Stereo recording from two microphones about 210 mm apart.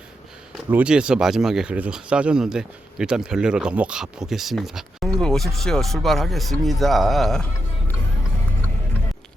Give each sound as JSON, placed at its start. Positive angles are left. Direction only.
{"t": 0.5, "sound": "speech", "side_deg": -5}